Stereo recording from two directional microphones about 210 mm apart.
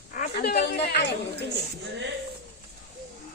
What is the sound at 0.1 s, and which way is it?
Speech, 45° left (ahead or behind).